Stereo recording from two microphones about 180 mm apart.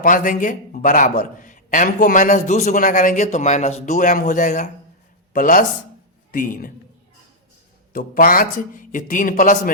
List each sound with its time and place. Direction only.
0.0 s a man's voice: 45° left (ahead or behind)
7.9 s a man's voice: 50° left (ahead or behind)